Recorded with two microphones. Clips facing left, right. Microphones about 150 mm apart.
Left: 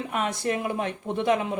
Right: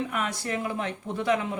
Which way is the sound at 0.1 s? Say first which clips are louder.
Left 3 dB; 25° left (ahead or behind).